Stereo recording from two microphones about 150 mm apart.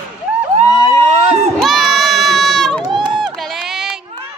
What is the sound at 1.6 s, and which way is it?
Crowd, centre (ahead or behind).